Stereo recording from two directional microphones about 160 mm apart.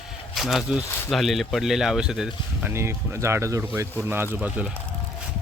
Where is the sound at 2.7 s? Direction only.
15° right (ahead or behind).